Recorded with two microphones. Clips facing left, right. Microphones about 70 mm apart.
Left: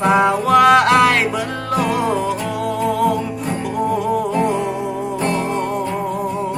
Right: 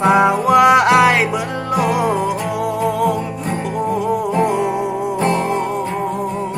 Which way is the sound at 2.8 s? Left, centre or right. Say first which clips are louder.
Left 1 dB; centre.